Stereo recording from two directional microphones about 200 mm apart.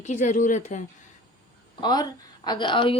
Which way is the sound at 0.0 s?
40° left (ahead or behind).